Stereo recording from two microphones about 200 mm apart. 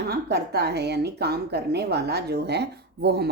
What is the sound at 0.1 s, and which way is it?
A woman's voice, 55° right (ahead or behind).